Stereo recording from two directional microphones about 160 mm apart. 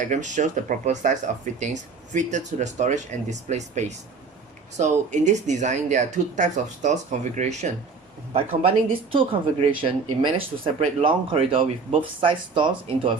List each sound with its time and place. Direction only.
0.0 s speech: 50° right (ahead or behind)
8.9 s speech: 35° right (ahead or behind)